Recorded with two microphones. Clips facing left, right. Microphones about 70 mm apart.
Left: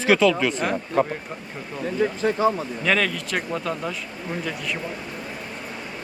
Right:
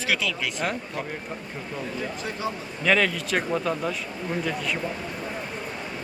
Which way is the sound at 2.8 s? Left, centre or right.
Centre.